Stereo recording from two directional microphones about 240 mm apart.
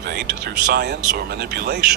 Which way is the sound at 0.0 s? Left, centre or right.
Right.